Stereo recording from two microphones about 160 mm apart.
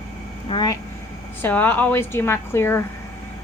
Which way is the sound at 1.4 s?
10° left (ahead or behind).